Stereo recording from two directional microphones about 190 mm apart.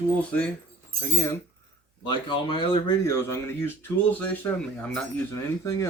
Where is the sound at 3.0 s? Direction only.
15° left (ahead or behind).